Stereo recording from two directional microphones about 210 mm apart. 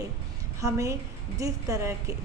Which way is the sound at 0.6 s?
15° right (ahead or behind).